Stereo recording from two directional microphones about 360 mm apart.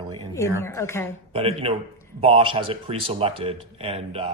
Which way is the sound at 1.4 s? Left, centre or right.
Centre.